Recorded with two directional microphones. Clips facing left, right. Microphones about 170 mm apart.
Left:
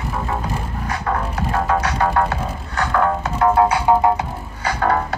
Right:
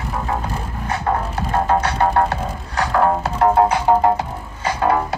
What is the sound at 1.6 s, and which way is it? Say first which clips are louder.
Music: right 2 dB; 30° right (ahead or behind).